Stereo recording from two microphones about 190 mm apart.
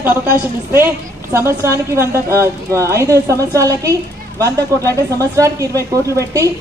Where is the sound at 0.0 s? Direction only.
10° right (ahead or behind).